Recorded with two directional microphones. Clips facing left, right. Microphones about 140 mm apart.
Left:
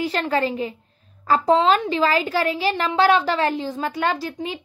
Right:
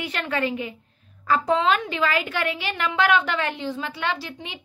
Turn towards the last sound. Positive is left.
turn(degrees=40)  # may be behind; listen again after turning